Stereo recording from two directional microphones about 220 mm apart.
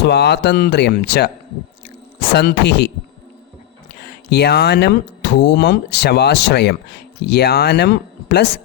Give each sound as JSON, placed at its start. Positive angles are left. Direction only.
{"t": 0.0, "sound": "speech", "side_deg": 50}
{"t": 2.3, "sound": "speech", "side_deg": 50}
{"t": 4.0, "sound": "speech", "side_deg": 50}